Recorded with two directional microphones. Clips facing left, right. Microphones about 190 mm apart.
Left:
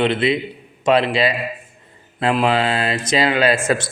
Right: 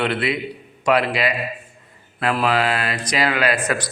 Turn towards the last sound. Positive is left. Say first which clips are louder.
# left 4 dB
turn(degrees=25)  # may be behind; listen again after turning